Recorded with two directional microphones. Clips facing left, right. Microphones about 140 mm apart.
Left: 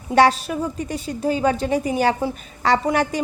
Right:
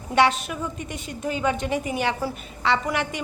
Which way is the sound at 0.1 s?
35° left (ahead or behind).